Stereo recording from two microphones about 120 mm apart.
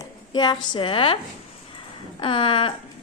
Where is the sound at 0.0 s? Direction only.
35° left (ahead or behind).